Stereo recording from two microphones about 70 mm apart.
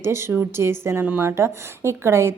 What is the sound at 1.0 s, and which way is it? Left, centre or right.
Speech, right.